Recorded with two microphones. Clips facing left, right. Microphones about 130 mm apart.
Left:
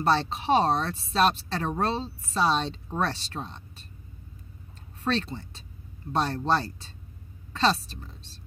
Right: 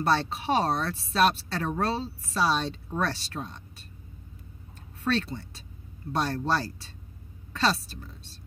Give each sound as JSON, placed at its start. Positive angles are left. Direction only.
{"t": 0.0, "sound": "speech", "side_deg": 25}
{"t": 5.0, "sound": "speech", "side_deg": 25}